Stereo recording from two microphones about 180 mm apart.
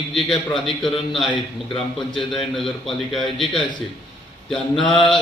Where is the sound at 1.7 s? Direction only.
Centre (ahead or behind).